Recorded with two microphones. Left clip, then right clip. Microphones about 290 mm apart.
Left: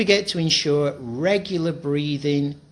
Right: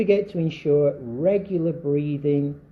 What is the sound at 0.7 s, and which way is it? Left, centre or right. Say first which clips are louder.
Speech: right 4 dB; left.